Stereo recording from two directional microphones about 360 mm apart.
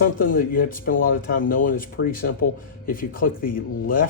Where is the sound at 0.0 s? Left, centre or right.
Left.